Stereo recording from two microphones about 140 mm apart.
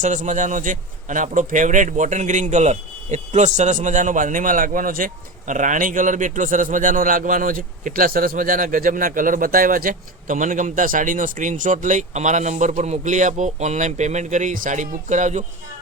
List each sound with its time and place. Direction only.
0.0 s a man's voice: 60° right (ahead or behind)